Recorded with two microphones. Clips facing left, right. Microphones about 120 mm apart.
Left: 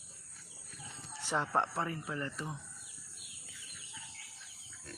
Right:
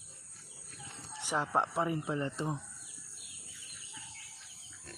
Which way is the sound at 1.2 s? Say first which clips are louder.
Right 1 dB; 10° right (ahead or behind).